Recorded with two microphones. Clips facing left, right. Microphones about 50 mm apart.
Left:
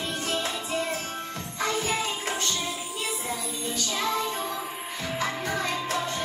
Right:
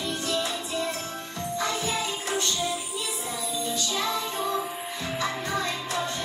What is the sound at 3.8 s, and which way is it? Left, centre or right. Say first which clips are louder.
Music: left 1 dB; left.